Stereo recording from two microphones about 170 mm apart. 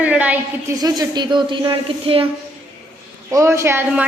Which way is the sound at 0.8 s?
25° right (ahead or behind).